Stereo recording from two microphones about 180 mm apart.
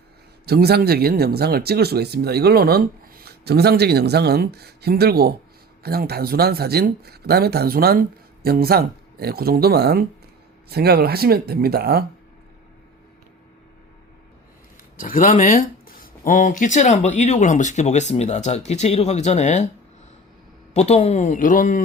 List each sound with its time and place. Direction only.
0.4 s speech: 60° right (ahead or behind)
14.9 s speech: 50° left (ahead or behind)
20.7 s speech: 40° left (ahead or behind)